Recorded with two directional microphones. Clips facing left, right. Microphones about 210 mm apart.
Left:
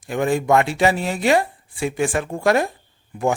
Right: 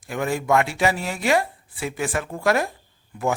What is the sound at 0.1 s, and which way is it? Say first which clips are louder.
Speech: left 4 dB; 25° left (ahead or behind).